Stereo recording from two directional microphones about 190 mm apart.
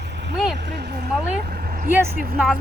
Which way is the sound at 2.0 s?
50° right (ahead or behind).